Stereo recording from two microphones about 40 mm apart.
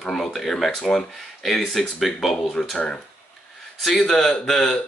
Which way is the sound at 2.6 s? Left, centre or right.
Centre.